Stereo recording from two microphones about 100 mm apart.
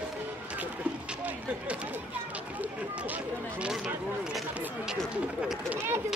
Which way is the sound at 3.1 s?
10° right (ahead or behind).